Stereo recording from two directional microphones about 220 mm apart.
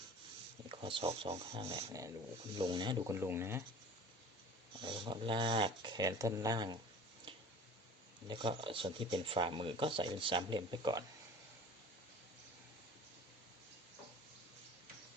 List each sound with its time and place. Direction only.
0.7 s speech: 25° right (ahead or behind)
4.8 s speech: 20° right (ahead or behind)
8.3 s speech: 20° right (ahead or behind)